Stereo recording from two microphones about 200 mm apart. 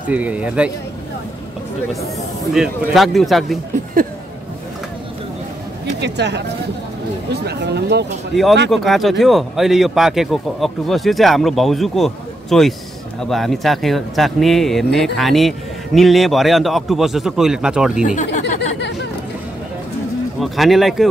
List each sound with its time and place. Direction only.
0.1 s a man's voice: 5° right (ahead or behind)
2.5 s speech: centre (ahead or behind)
5.9 s speech: 60° right (ahead or behind)
7.4 s speech: 55° right (ahead or behind)
8.6 s speech: centre (ahead or behind)
18.0 s speech: 40° left (ahead or behind)
20.3 s speech: centre (ahead or behind)